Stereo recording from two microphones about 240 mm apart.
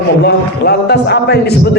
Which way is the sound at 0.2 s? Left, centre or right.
Left.